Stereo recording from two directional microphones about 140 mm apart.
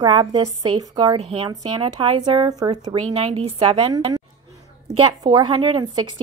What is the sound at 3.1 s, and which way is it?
Speech, 50° right (ahead or behind).